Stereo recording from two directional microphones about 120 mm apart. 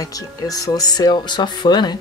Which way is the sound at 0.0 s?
30° left (ahead or behind).